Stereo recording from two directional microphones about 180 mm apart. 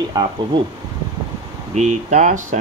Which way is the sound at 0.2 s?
20° right (ahead or behind).